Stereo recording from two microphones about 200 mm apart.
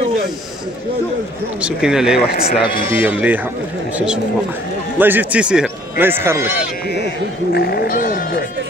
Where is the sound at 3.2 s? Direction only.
10° right (ahead or behind).